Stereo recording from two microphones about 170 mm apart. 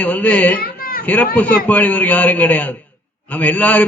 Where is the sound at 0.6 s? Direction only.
60° left (ahead or behind).